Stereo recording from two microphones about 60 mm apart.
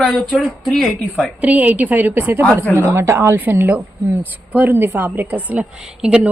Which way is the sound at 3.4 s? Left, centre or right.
Right.